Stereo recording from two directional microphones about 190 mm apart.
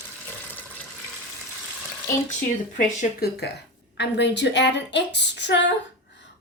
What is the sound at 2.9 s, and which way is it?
Speech, 55° left (ahead or behind).